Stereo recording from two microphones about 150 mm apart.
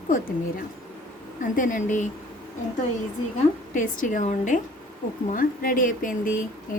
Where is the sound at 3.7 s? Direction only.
60° left (ahead or behind).